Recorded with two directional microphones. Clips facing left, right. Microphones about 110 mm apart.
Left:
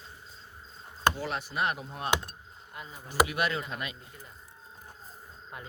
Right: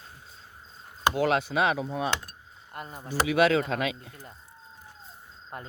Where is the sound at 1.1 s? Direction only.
80° right.